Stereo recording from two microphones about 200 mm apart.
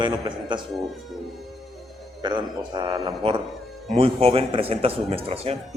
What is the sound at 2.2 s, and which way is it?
Speech, 20° right (ahead or behind).